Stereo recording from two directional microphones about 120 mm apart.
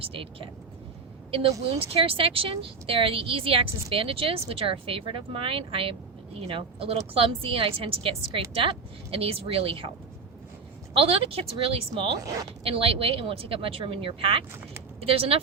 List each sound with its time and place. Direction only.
0.1 s speech: 50° right (ahead or behind)
10.9 s speech: 50° right (ahead or behind)
12.2 s speech: 30° right (ahead or behind)
12.6 s speech: 50° right (ahead or behind)